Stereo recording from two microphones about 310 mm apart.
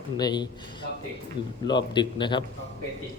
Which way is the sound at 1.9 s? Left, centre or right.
Centre.